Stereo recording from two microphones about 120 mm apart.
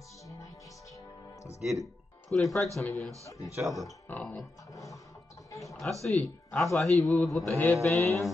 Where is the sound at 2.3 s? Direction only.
Centre (ahead or behind).